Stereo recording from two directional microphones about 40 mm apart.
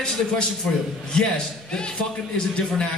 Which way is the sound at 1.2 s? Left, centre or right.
Centre.